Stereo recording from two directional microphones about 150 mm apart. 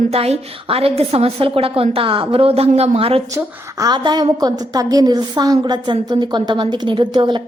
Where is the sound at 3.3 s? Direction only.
25° right (ahead or behind).